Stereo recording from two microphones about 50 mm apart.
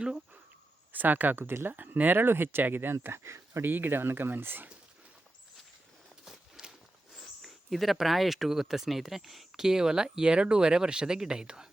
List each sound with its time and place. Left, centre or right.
0.9 s speech: right
3.1 s speech: right
3.6 s speech: right
6.6 s a sound: centre
7.4 s speech: centre